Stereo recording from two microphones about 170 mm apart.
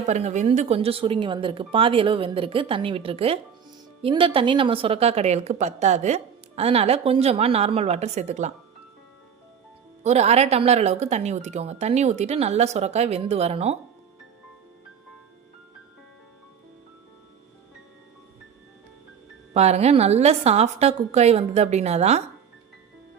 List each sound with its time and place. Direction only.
0.0 s a woman's voice: 40° right (ahead or behind)
10.0 s a woman's voice: 40° right (ahead or behind)
19.5 s a woman's voice: 40° right (ahead or behind)